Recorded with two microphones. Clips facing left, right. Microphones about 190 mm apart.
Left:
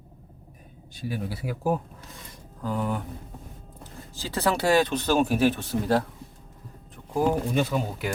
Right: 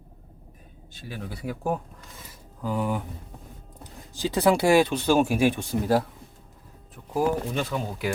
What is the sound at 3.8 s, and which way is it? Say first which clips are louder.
Speech: right 8 dB; 15° right (ahead or behind).